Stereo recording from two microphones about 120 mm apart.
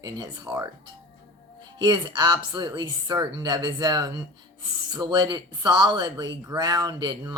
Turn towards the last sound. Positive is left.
turn(degrees=-35)  # may be behind; listen again after turning